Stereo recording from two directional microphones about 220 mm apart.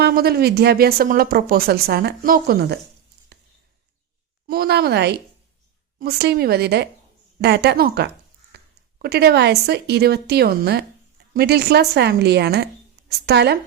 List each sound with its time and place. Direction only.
0.0 s a woman's voice: 45° right (ahead or behind)
3.3 s a sound: 50° right (ahead or behind)
4.4 s a woman's voice: 45° right (ahead or behind)